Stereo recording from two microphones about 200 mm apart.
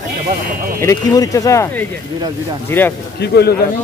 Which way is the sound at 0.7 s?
15° left (ahead or behind).